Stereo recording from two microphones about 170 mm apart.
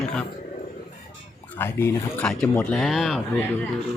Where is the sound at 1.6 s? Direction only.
15° left (ahead or behind).